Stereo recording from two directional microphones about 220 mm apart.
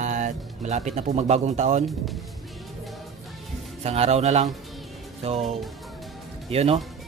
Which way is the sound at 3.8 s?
30° right (ahead or behind).